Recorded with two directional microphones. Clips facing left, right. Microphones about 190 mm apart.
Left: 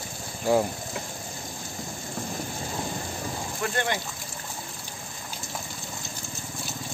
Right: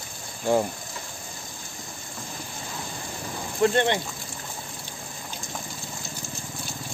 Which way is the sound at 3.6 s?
25° right (ahead or behind).